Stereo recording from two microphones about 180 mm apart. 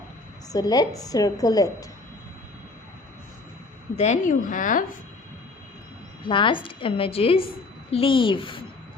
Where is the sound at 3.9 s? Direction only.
40° left (ahead or behind).